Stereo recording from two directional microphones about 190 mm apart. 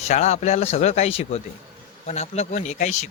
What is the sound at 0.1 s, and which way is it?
Speech, 35° left (ahead or behind).